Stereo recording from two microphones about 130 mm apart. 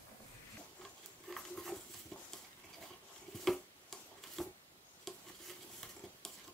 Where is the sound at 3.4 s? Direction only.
Centre (ahead or behind).